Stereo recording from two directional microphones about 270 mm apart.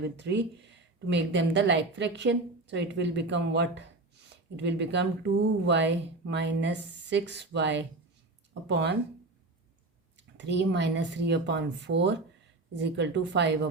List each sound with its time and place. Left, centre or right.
0.2 s speech: right
10.2 s speech: right